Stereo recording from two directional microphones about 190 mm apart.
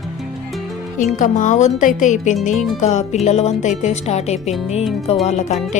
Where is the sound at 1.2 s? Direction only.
40° left (ahead or behind).